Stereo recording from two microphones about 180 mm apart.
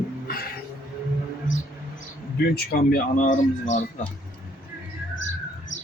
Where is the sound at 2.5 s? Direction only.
60° left (ahead or behind).